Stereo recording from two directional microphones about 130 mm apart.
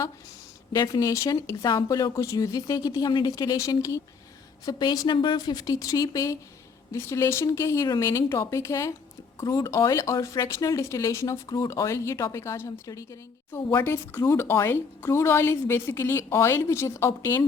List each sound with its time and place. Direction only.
0.7 s speech: 30° left (ahead or behind)